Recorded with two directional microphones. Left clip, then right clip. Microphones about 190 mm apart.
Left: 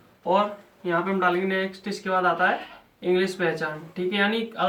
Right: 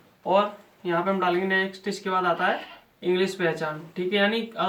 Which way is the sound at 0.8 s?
25° right (ahead or behind).